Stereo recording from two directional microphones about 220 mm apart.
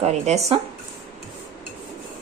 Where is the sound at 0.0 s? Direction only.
30° right (ahead or behind).